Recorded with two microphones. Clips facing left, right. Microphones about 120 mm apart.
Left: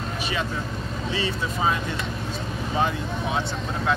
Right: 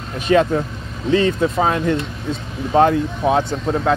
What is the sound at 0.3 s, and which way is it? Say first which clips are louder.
Speech: right 17 dB; 60° right (ahead or behind).